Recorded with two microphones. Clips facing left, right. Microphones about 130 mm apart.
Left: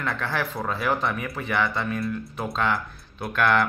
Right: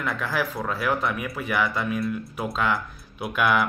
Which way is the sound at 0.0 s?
5° right (ahead or behind).